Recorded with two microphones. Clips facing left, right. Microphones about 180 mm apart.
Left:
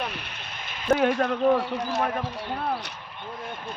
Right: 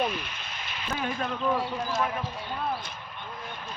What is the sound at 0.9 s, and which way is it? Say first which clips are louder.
Speech: left 8 dB; 70° left (ahead or behind).